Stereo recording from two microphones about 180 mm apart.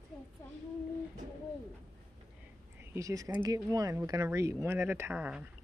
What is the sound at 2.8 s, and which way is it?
Speech, 15° right (ahead or behind).